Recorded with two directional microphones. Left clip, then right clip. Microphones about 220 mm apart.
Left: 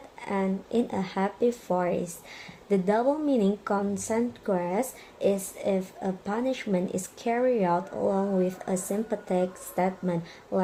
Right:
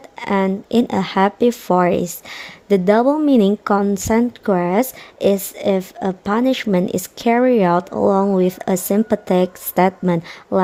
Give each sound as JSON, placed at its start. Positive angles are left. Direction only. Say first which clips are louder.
{"t": 0.2, "sound": "speech", "louder": "right 11 dB", "side_deg": -50}